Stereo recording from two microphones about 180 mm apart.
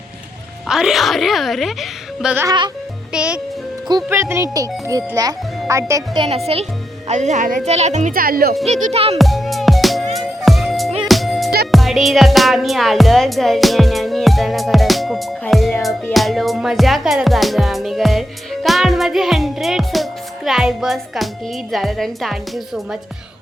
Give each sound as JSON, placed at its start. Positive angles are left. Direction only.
{"t": 0.7, "sound": "a woman's voice", "side_deg": -5}
{"t": 3.8, "sound": "a child's voice", "side_deg": -20}
{"t": 6.2, "sound": "a woman's voice", "side_deg": -35}
{"t": 8.6, "sound": "speech", "side_deg": -35}
{"t": 9.1, "sound": "music", "side_deg": 0}
{"t": 21.7, "sound": "a woman's voice", "side_deg": 0}